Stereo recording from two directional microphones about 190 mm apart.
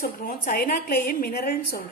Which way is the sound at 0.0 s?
50° left (ahead or behind).